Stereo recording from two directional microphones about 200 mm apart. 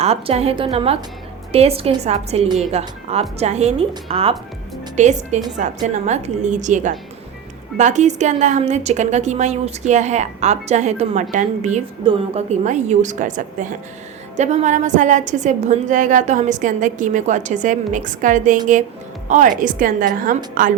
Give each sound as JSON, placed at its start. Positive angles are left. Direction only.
{"t": 0.0, "sound": "a woman's voice", "side_deg": -30}